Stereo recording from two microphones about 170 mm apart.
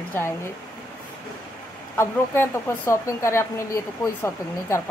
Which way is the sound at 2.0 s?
15° left (ahead or behind).